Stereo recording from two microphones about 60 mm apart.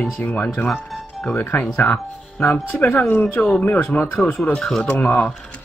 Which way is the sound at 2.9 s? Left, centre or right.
Left.